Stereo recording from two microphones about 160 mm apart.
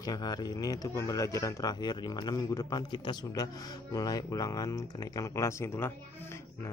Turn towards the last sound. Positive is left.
turn(degrees=15)  # may be behind; listen again after turning